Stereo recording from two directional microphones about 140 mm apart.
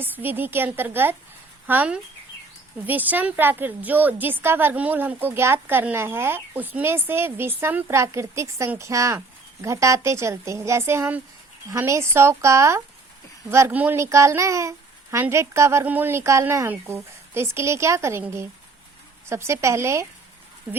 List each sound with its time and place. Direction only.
0.0 s a woman's voice: 15° right (ahead or behind)